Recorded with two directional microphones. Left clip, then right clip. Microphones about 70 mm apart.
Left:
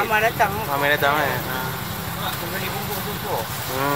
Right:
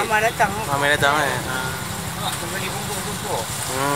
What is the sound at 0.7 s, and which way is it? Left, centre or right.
Speech, centre.